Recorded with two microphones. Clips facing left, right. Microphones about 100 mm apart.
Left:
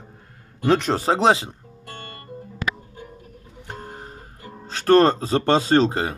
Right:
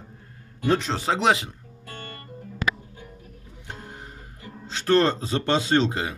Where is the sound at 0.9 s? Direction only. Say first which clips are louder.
Left 4 dB; 40° left (ahead or behind).